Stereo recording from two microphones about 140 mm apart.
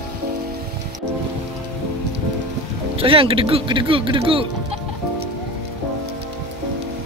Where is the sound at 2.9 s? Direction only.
40° right (ahead or behind).